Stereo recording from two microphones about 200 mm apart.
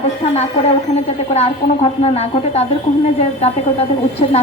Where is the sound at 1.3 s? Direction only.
30° left (ahead or behind).